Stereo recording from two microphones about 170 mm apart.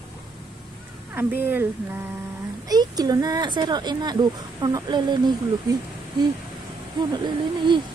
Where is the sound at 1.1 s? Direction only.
10° right (ahead or behind).